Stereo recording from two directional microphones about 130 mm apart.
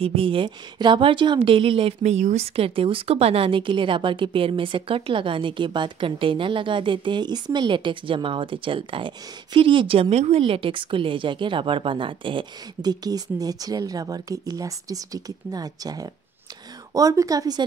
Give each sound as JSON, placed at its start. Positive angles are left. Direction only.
{"t": 0.0, "sound": "a woman's voice", "side_deg": -45}
{"t": 2.1, "sound": "a woman's voice", "side_deg": -60}